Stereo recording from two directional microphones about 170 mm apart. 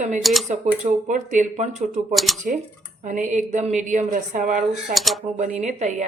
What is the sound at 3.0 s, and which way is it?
A woman's voice, 45° right (ahead or behind).